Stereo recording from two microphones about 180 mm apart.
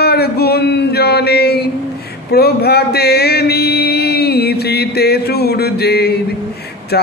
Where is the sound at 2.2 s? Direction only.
60° left (ahead or behind).